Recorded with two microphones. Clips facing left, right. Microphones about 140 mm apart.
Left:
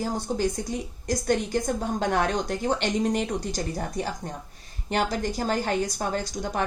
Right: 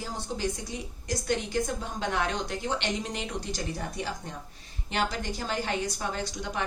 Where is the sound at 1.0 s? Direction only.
45° left (ahead or behind).